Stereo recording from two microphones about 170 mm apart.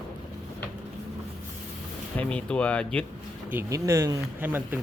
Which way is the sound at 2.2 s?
5° left (ahead or behind).